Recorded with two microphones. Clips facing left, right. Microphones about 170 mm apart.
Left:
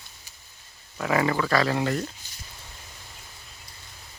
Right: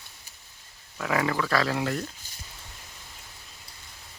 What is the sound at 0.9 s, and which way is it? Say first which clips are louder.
Speech: left 3 dB; centre (ahead or behind).